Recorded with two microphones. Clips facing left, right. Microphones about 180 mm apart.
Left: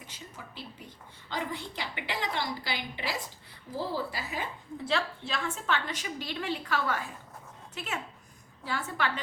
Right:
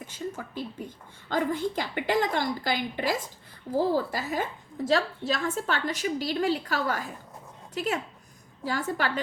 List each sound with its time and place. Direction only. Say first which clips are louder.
0.1 s a woman's voice: right 12 dB; 45° right (ahead or behind)